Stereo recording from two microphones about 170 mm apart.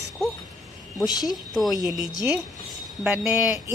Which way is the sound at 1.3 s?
Centre (ahead or behind).